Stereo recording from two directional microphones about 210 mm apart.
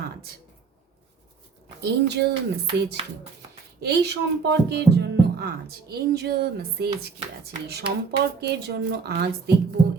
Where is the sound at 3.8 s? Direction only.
50° right (ahead or behind).